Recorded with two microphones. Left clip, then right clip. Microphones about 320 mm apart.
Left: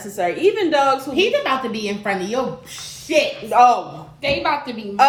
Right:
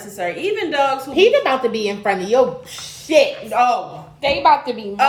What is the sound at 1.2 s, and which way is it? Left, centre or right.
Speech, centre.